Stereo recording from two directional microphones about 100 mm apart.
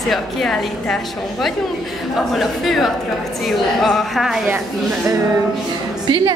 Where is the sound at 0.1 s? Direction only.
Centre (ahead or behind).